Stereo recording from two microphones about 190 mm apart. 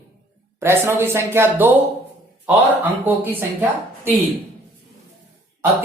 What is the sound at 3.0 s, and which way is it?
Speech, 10° right (ahead or behind).